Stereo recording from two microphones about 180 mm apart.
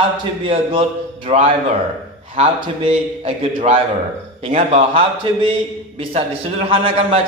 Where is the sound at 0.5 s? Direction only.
30° right (ahead or behind).